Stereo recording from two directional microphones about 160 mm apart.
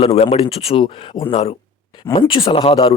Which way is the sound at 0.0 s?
40° left (ahead or behind).